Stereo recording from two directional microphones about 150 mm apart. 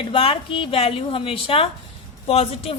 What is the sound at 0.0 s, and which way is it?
A woman's voice, 35° left (ahead or behind).